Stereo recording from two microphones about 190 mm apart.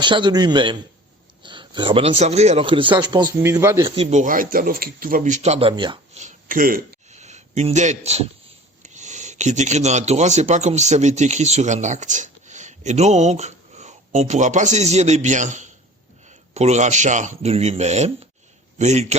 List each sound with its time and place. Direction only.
0.0 s a man's voice: 25° right (ahead or behind)
3.8 s speech: 30° right (ahead or behind)
6.1 s a sound: 45° right (ahead or behind)
8.8 s speech: 40° right (ahead or behind)